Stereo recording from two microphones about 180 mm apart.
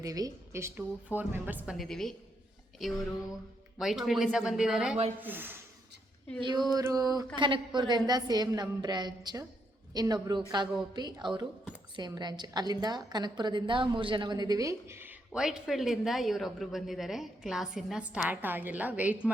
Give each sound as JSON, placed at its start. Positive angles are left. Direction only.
{"t": 0.0, "sound": "a woman's voice", "side_deg": -20}
{"t": 1.7, "sound": "a woman's voice", "side_deg": 0}
{"t": 6.4, "sound": "a woman's voice", "side_deg": -25}